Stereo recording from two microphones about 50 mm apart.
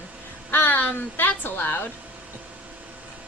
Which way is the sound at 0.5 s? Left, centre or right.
Left.